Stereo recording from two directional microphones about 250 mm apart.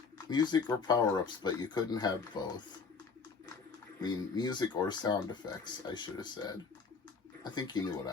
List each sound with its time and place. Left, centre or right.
0.3 s speech: centre
4.0 s speech: centre